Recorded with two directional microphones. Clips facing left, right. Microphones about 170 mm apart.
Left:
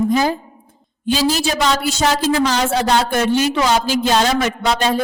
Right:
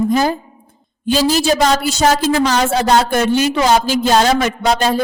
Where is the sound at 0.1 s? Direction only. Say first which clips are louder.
Right 1 dB; 45° right (ahead or behind).